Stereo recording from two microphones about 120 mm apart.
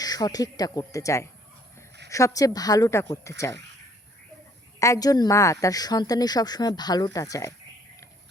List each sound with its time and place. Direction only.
0.0 s speech: 30° left (ahead or behind)
4.8 s speech: 30° left (ahead or behind)